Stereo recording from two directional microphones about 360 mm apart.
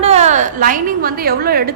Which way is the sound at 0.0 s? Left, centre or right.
Centre.